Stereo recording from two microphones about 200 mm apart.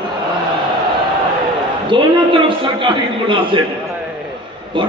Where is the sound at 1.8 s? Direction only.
25° right (ahead or behind).